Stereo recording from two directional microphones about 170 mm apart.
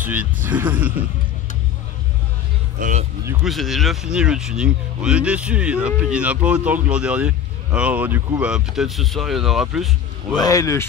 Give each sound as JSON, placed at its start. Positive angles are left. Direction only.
{"t": 0.0, "sound": "speech", "side_deg": -10}
{"t": 2.8, "sound": "speech", "side_deg": -45}
{"t": 3.4, "sound": "speech", "side_deg": 0}
{"t": 10.3, "sound": "speech", "side_deg": 20}